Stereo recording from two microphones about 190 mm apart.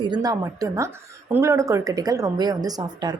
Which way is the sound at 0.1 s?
20° right (ahead or behind).